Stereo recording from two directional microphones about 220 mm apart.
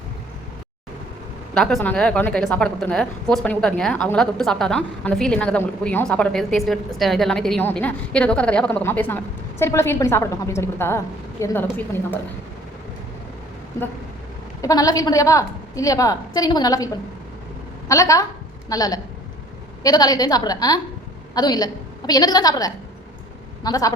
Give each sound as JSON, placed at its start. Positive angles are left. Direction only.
{"t": 1.5, "sound": "a woman's voice", "side_deg": 0}
{"t": 13.7, "sound": "a woman's voice", "side_deg": 15}